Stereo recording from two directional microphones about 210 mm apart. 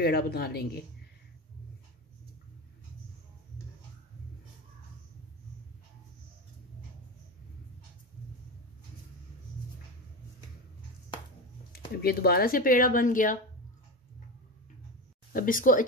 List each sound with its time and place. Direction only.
0.0 s speech: 50° left (ahead or behind)
11.9 s speech: 45° left (ahead or behind)
15.3 s speech: 40° left (ahead or behind)